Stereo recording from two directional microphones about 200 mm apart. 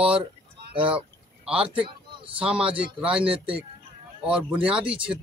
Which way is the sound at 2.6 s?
25° right (ahead or behind).